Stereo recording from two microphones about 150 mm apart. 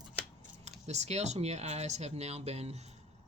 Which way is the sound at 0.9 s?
50° right (ahead or behind).